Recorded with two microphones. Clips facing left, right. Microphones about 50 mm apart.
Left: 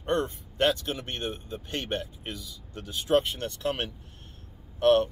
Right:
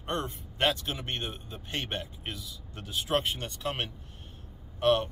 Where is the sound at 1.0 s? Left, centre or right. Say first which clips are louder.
Left 2 dB; centre.